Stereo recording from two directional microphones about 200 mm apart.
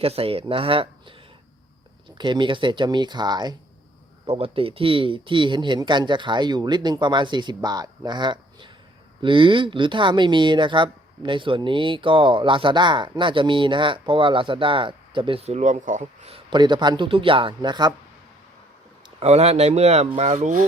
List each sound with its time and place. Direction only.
0.0 s speech: 30° right (ahead or behind)
2.1 s speech: 25° right (ahead or behind)
19.2 s speech: 30° right (ahead or behind)